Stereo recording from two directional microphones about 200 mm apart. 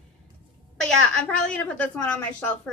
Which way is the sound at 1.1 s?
5° left (ahead or behind).